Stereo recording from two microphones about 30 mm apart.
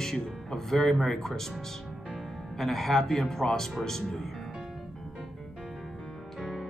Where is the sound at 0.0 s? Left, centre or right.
Centre.